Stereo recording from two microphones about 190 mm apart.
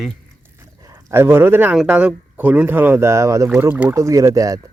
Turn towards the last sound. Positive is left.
turn(degrees=-20)  # may be behind; listen again after turning